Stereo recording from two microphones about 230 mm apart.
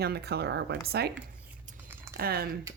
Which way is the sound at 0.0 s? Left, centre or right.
Right.